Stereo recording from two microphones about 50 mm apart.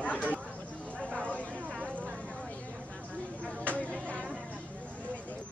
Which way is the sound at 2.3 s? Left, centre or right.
Left.